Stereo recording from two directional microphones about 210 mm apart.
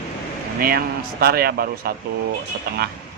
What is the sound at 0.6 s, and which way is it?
Speech, 45° right (ahead or behind).